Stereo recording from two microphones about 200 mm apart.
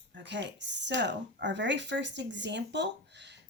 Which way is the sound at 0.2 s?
60° right (ahead or behind).